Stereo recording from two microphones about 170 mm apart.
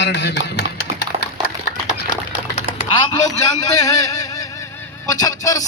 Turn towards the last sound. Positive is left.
turn(degrees=20)  # may be behind; listen again after turning